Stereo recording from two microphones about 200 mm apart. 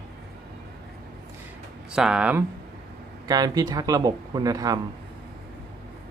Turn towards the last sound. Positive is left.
turn(degrees=-20)  # may be behind; listen again after turning